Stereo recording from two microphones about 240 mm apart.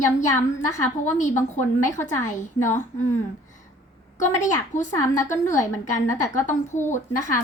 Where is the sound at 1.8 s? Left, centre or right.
Centre.